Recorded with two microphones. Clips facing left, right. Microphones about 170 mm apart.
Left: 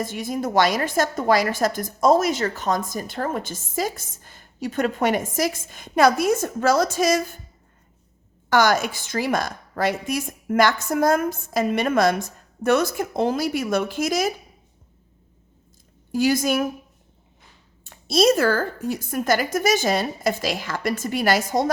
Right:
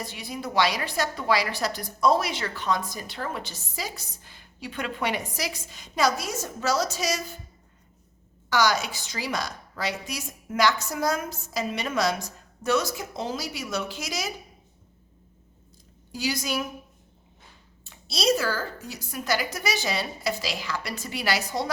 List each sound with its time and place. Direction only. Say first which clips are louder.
0.0 s a woman's voice: left 8 dB; 45° left (ahead or behind)
8.4 s a woman's voice: left 5 dB; 55° left (ahead or behind)
16.1 s a woman's voice: left 9 dB; 50° left (ahead or behind)
17.8 s a woman's voice: left 7 dB; 50° left (ahead or behind)